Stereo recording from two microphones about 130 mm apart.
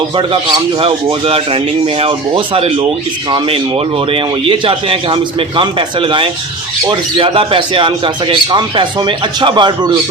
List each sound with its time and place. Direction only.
0.2 s speech: 45° right (ahead or behind)